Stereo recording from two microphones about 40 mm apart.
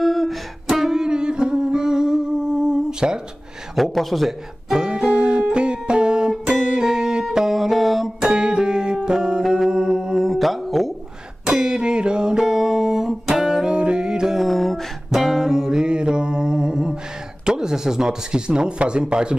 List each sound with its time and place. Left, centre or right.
0.0 s music: centre
3.7 s a man's voice: centre
4.6 s music: centre
8.3 s music: right
10.2 s mantra: centre
11.4 s music: centre
13.4 s music: centre
14.3 s music: centre
15.0 s music: centre
17.5 s speech: centre